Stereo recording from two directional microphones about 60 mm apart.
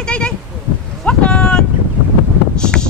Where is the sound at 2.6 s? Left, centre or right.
Centre.